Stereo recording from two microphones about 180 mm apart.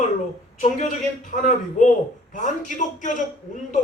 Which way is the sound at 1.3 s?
45° left (ahead or behind).